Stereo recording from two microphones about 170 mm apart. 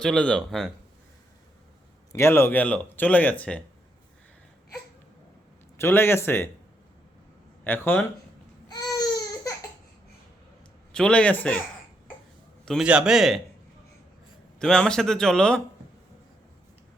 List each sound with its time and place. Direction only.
0.0 s a man's voice: 5° left (ahead or behind)
2.1 s speech: 15° left (ahead or behind)
5.7 s speech: 15° left (ahead or behind)
7.6 s speech: 10° left (ahead or behind)
8.7 s baby cry: 25° left (ahead or behind)
10.9 s speech: 5° left (ahead or behind)
12.6 s a man's voice: 5° right (ahead or behind)
14.6 s a man's voice: 5° left (ahead or behind)